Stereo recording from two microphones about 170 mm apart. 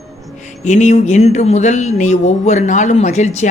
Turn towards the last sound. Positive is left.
turn(degrees=45)  # may be behind; listen again after turning